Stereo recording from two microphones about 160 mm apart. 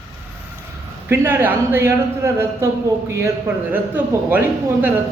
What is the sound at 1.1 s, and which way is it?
Speech, 15° right (ahead or behind).